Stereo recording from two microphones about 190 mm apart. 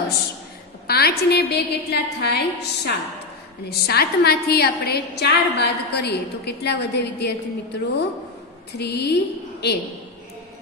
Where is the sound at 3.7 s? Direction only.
55° left (ahead or behind).